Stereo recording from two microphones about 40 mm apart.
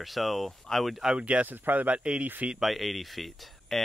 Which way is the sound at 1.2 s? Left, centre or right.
Right.